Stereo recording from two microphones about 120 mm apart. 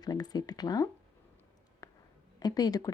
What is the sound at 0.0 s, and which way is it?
Speech, 35° left (ahead or behind).